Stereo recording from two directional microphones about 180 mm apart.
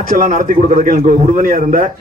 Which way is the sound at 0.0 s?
50° right (ahead or behind).